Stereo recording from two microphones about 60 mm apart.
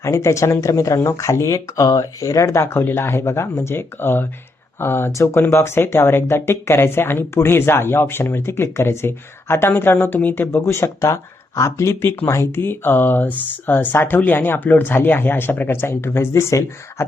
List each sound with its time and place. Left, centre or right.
0.0 s speech: left
2.6 s speech: left
5.1 s speech: left
12.0 s speech: left